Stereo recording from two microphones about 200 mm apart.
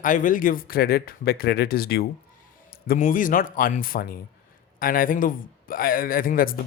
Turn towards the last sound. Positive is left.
turn(degrees=45)  # may be behind; listen again after turning